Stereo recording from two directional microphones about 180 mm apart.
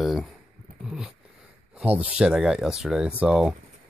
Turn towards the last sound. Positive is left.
turn(degrees=-5)  # may be behind; listen again after turning